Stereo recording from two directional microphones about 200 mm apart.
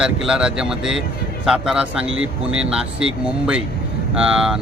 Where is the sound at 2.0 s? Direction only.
80° right.